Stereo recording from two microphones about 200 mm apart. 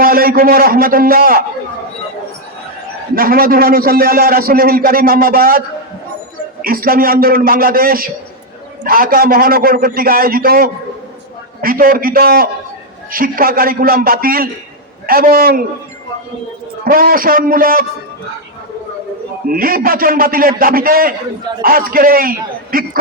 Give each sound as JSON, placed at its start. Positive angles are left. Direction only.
{"t": 0.0, "sound": "a man's voice", "side_deg": -45}
{"t": 3.2, "sound": "a man's voice", "side_deg": -45}
{"t": 16.8, "sound": "a man's voice", "side_deg": -45}
{"t": 19.5, "sound": "a man's voice", "side_deg": -45}